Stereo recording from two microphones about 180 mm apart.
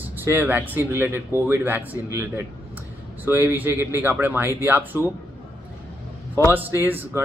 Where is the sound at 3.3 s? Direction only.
10° right (ahead or behind).